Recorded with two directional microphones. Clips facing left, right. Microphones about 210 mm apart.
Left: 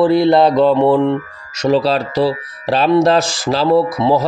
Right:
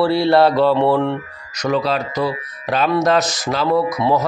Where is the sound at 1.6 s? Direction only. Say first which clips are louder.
Left 5 dB; 30° left (ahead or behind).